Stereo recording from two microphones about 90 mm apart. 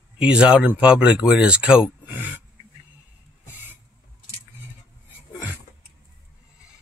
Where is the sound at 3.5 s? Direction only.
20° right (ahead or behind).